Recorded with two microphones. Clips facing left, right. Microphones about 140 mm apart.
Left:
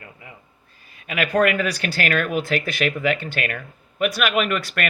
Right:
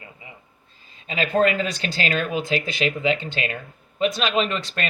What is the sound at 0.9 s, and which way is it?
Speech, 25° right (ahead or behind).